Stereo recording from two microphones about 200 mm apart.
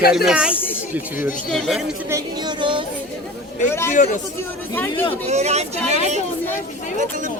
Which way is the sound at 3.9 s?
40° left (ahead or behind).